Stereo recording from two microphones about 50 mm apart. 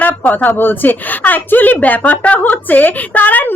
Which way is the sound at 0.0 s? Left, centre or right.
Left.